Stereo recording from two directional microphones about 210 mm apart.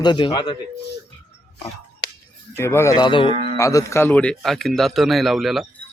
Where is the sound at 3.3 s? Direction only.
35° right (ahead or behind).